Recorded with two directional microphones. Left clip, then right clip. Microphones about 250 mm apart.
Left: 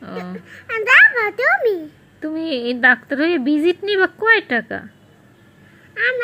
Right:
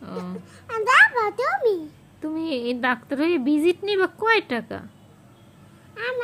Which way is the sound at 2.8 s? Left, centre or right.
Centre.